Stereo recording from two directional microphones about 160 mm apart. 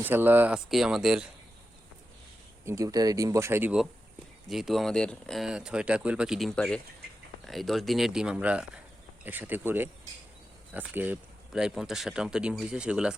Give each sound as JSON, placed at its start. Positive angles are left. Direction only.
{"t": 0.0, "sound": "speech", "side_deg": -10}
{"t": 2.6, "sound": "speech", "side_deg": -20}